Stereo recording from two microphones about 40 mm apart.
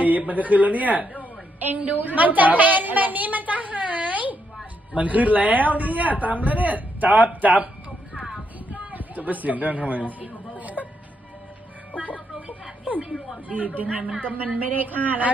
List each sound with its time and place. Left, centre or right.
0.0 s a man's voice: right
8.7 s chatter: right
13.5 s a man's voice: right